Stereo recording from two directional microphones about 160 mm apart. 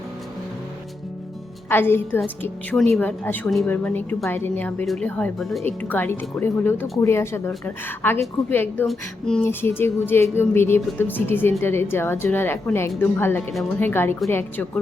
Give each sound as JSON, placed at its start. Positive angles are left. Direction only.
{"t": 1.7, "sound": "a woman's voice", "side_deg": 15}
{"t": 5.6, "sound": "a woman's voice", "side_deg": 15}